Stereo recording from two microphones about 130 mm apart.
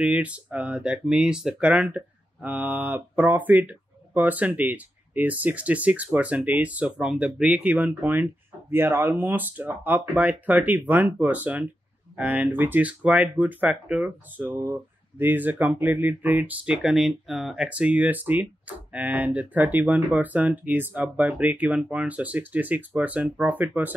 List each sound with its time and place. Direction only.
0.0 s speech: 10° right (ahead or behind)